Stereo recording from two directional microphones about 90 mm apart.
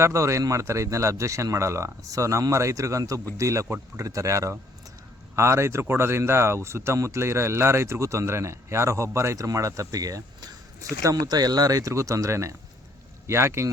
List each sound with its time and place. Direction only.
0.0 s speech: 35° right (ahead or behind)